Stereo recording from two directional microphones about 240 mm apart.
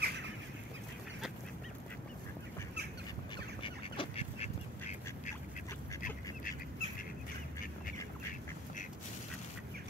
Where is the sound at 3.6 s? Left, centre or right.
Left.